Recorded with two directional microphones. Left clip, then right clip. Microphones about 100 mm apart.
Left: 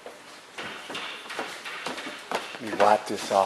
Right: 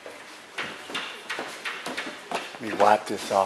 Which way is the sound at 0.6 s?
20° right (ahead or behind).